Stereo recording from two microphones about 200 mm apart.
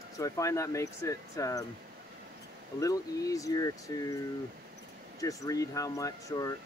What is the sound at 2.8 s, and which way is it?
Speech, 15° left (ahead or behind).